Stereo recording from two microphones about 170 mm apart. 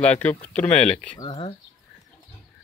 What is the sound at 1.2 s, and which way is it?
Speech, 30° left (ahead or behind).